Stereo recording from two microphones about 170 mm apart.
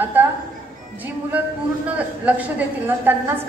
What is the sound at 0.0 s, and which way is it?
Music, 10° right (ahead or behind).